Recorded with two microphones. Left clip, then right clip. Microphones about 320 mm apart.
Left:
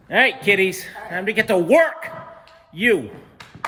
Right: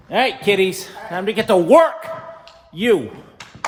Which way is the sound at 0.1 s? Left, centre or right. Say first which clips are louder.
Left 1 dB; centre.